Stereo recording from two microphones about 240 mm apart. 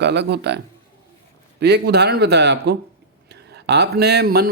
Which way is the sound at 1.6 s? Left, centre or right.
Right.